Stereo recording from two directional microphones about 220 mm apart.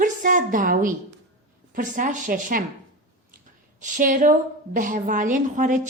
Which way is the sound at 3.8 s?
35° right (ahead or behind).